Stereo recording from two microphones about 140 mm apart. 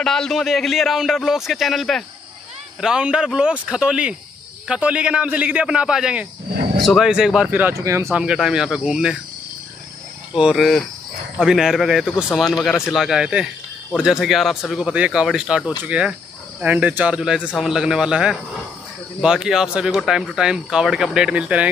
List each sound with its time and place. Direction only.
0.0 s a man's voice: 5° left (ahead or behind)
7.8 s speech: 20° right (ahead or behind)
8.1 s speech: 5° right (ahead or behind)
10.3 s a man's voice: centre (ahead or behind)